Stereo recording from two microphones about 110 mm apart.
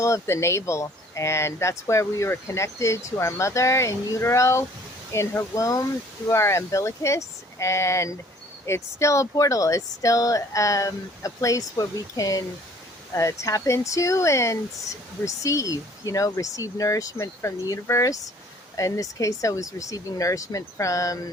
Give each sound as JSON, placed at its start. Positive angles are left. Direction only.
{"t": 0.0, "sound": "speech", "side_deg": 25}